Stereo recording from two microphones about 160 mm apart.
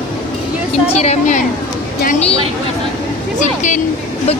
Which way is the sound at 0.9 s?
45° left (ahead or behind).